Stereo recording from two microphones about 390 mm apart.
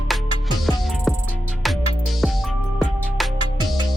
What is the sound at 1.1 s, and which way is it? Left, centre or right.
Music, centre.